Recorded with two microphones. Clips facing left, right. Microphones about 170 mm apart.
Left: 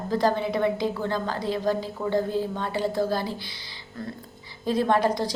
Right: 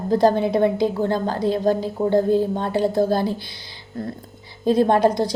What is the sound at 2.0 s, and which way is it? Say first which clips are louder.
Speech: right 8 dB; 30° right (ahead or behind).